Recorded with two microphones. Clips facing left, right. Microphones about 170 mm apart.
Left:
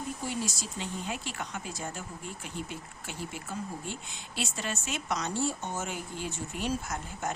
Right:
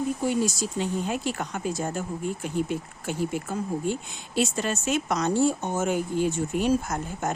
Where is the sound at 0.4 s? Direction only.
45° right (ahead or behind).